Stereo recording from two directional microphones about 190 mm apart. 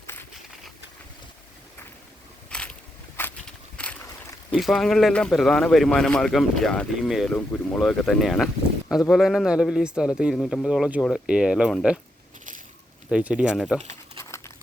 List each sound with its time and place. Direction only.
2.5 s a sound: 5° left (ahead or behind)
3.2 s walk: 10° left (ahead or behind)
3.8 s boat: 5° left (ahead or behind)
4.5 s speech: centre (ahead or behind)
13.1 s speech: 5° right (ahead or behind)
14.3 s a sound: 15° left (ahead or behind)